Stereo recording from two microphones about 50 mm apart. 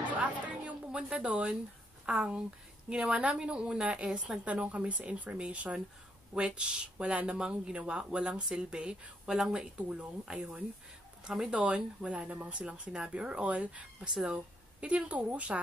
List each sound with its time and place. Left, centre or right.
0.2 s music: right
2.0 s speech: right
9.8 s speech: right
14.1 s speech: centre
14.8 s speech: right